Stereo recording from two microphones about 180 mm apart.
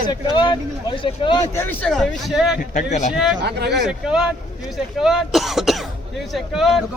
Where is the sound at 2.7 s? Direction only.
40° left (ahead or behind).